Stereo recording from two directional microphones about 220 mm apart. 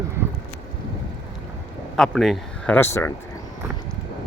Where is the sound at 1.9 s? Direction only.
Centre (ahead or behind).